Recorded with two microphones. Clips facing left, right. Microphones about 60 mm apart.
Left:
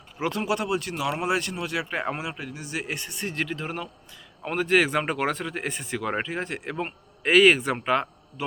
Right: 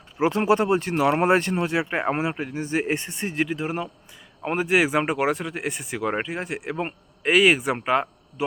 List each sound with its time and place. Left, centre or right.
0.2 s speech: right